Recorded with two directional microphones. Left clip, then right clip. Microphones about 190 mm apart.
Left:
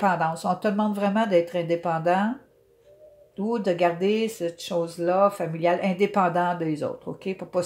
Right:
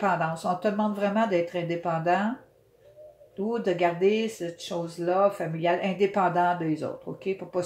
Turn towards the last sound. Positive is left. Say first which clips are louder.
# left 2 dB
turn(degrees=45)  # may be behind; listen again after turning